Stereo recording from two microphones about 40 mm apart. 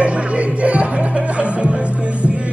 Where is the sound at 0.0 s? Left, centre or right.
Right.